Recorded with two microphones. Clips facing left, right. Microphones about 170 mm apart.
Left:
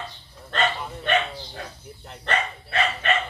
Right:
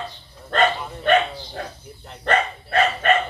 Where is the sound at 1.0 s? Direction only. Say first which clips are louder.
Right 6 dB; 45° right (ahead or behind).